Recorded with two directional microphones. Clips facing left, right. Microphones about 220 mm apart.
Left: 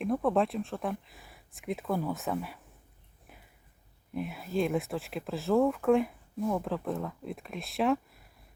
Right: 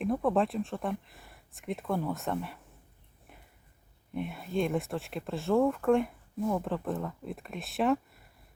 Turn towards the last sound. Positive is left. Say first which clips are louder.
# even
turn(degrees=0)  # may be behind; listen again after turning